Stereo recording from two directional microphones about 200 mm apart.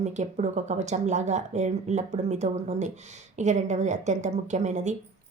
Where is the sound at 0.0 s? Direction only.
35° right (ahead or behind).